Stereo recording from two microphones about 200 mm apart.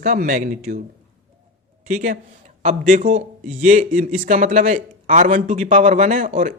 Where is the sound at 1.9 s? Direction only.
40° right (ahead or behind).